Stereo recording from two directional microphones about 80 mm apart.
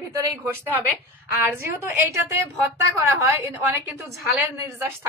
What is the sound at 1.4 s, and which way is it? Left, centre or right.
A woman's voice, right.